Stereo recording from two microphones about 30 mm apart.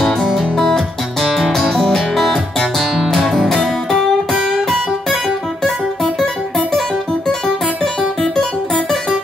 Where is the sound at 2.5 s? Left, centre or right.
Centre.